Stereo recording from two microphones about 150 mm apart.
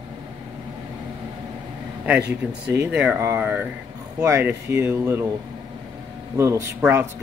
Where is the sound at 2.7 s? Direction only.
15° right (ahead or behind).